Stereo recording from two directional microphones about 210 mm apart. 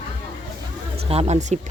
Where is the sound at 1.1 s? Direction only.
30° right (ahead or behind).